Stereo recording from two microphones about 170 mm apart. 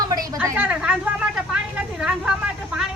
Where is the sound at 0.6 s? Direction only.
5° right (ahead or behind).